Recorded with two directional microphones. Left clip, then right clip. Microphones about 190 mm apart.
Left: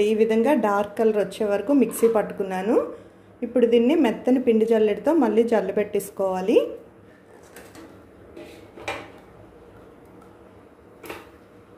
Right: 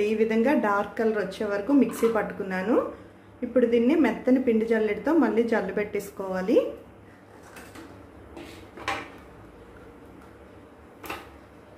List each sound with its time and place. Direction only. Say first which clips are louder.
0.0 s a woman's voice: left 4 dB; 25° left (ahead or behind)